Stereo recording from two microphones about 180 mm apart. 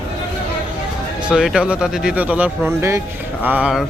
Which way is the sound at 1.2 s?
5° right (ahead or behind).